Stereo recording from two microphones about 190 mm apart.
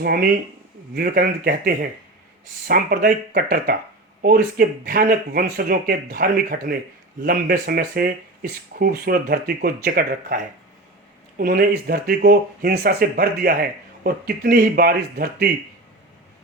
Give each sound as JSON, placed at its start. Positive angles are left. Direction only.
{"t": 0.0, "sound": "speech", "side_deg": -55}